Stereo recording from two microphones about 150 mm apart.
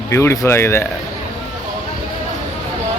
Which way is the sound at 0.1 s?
15° left (ahead or behind).